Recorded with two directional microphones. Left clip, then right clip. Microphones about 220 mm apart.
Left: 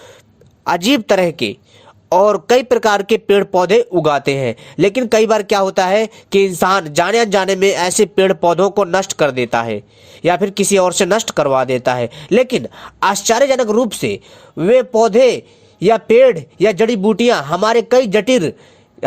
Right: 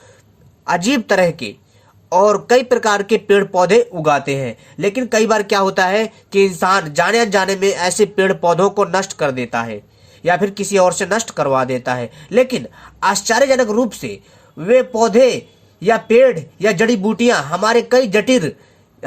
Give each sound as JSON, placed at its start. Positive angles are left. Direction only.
{"t": 0.6, "sound": "speech", "side_deg": 40}